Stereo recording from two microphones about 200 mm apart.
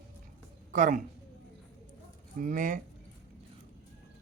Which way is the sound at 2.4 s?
40° right (ahead or behind).